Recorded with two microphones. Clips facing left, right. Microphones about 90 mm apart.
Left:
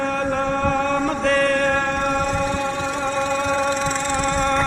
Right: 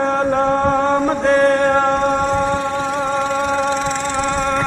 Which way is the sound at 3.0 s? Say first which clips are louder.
Right 2 dB; 25° right (ahead or behind).